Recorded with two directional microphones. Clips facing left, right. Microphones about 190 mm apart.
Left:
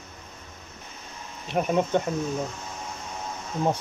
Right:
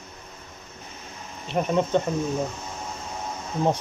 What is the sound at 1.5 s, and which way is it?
Speech, 5° left (ahead or behind).